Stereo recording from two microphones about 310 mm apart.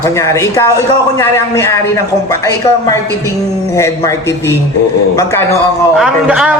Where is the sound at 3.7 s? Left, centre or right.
Centre.